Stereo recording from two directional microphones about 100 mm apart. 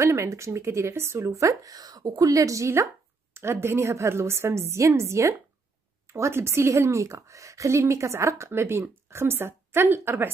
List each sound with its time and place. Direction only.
0.0 s a woman's voice: 30° right (ahead or behind)